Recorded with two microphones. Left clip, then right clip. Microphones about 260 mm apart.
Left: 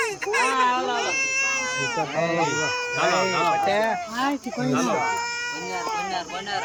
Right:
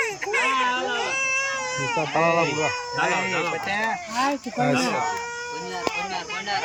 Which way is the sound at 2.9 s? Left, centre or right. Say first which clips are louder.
Left 3 dB; centre.